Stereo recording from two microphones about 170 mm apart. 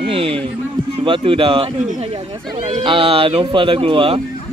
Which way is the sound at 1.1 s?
30° right (ahead or behind).